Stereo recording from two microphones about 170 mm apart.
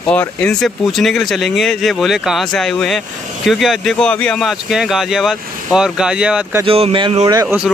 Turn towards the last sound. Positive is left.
turn(degrees=-15)  # may be behind; listen again after turning